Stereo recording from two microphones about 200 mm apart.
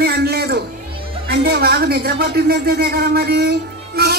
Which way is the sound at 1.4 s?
50° right (ahead or behind).